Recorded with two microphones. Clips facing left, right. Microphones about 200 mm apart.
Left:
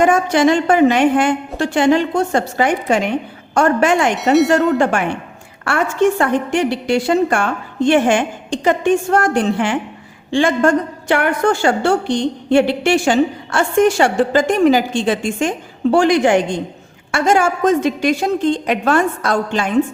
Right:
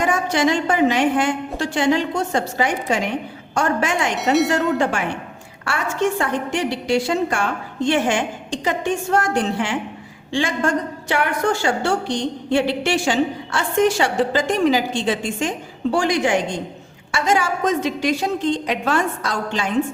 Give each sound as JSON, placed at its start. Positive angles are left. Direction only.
{"t": 0.0, "sound": "a woman's voice", "side_deg": 55}
{"t": 4.2, "sound": "speech", "side_deg": 0}
{"t": 4.8, "sound": "a woman's voice", "side_deg": 55}